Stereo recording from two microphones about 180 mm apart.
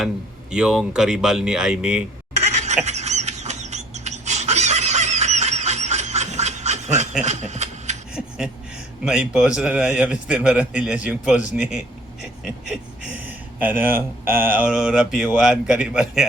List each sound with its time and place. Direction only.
0.5 s a man's voice: 5° right (ahead or behind)
2.5 s a sound: 40° right (ahead or behind)
9.0 s a man's voice: 5° right (ahead or behind)